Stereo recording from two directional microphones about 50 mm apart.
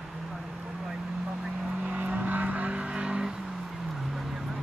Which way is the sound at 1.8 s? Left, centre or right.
Right.